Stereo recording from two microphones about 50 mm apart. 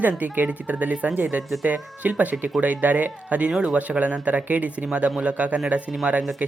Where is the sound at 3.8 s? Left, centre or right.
Right.